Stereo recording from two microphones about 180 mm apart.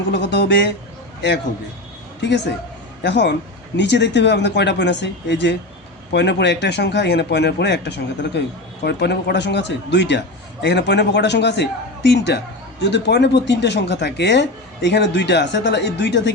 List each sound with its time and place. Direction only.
0.1 s speech: 70° left (ahead or behind)
3.0 s speech: 70° left (ahead or behind)